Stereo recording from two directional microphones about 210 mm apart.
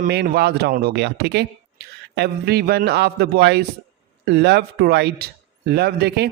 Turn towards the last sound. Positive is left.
turn(degrees=-50)  # may be behind; listen again after turning